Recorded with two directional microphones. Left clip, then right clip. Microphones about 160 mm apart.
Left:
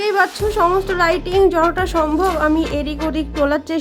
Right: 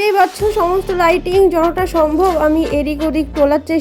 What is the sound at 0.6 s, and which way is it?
A woman's voice, 15° right (ahead or behind).